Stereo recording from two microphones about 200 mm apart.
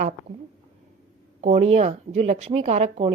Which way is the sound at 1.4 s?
30° right (ahead or behind).